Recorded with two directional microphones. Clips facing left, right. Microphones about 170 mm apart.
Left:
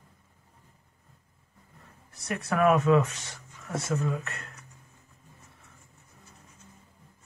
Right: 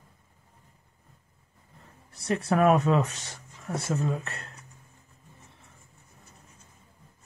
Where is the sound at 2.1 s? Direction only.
30° right (ahead or behind).